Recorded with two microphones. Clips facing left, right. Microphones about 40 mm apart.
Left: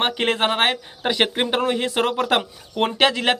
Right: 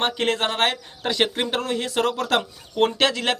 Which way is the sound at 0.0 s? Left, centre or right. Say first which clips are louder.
Left 2 dB; centre.